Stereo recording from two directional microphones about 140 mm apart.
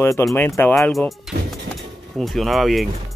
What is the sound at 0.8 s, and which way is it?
Speech, centre (ahead or behind).